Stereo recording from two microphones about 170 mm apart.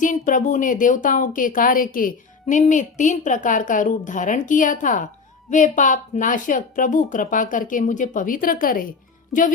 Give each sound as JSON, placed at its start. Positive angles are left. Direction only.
{"t": 0.0, "sound": "speech", "side_deg": 50}